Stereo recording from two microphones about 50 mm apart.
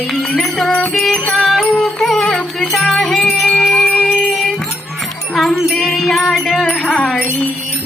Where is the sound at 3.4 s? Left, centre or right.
Left.